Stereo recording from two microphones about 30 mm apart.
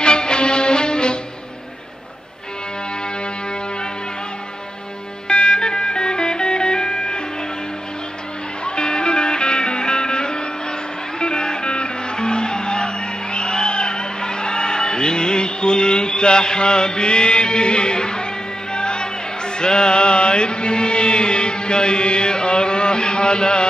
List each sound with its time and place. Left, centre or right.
0.0 s music: left
5.3 s music: left
8.6 s music: left